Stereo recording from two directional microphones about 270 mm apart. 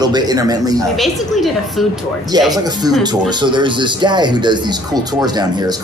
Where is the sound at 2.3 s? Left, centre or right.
Centre.